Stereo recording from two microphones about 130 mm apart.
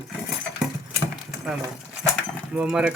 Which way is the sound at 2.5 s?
5° right (ahead or behind).